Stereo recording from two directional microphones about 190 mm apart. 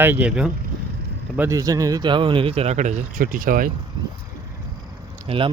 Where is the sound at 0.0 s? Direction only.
10° right (ahead or behind).